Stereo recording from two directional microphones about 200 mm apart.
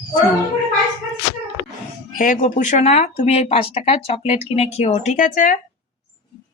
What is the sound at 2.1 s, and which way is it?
Speech, 40° left (ahead or behind).